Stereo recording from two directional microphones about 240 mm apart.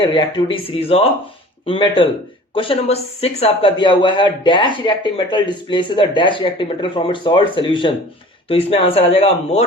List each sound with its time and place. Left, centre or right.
0.0 s speech: centre